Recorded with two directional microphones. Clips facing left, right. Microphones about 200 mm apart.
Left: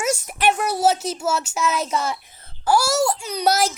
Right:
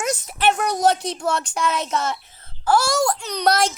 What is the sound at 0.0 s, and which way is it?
Speech, 10° left (ahead or behind).